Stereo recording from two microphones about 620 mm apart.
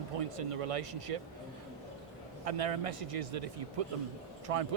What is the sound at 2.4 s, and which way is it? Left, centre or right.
A man's voice, right.